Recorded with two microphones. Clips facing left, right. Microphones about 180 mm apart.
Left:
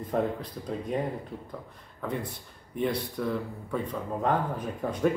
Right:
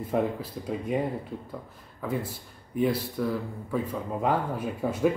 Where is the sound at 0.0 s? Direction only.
5° right (ahead or behind).